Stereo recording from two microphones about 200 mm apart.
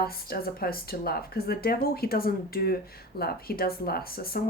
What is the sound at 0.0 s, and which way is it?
Speech, 50° left (ahead or behind).